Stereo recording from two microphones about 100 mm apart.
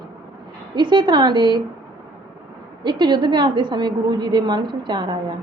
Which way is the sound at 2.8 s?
50° right (ahead or behind).